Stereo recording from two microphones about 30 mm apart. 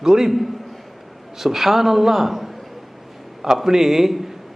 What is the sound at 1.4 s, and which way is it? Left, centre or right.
A man's voice, centre.